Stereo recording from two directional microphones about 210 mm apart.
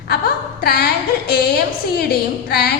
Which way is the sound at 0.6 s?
50° left (ahead or behind).